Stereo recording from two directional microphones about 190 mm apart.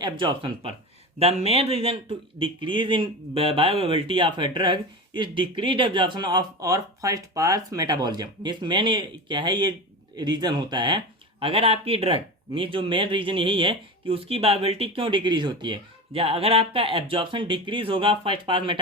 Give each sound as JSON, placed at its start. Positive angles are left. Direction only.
{"t": 0.0, "sound": "speech", "side_deg": -25}